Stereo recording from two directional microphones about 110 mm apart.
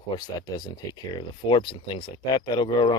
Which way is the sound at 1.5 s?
50° left (ahead or behind).